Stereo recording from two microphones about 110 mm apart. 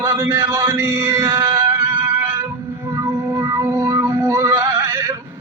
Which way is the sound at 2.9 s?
25° right (ahead or behind).